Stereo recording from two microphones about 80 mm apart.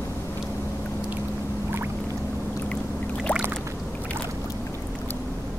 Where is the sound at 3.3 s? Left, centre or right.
Centre.